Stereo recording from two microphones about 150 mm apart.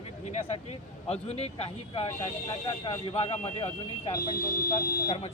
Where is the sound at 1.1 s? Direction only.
45° left (ahead or behind).